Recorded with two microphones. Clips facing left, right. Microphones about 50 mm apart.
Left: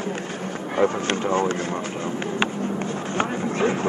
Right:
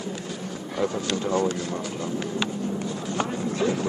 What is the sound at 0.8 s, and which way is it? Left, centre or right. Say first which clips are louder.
Speech: left 4 dB; left.